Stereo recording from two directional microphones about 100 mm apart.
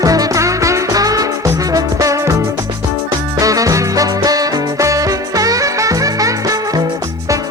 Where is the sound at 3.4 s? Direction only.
35° right (ahead or behind).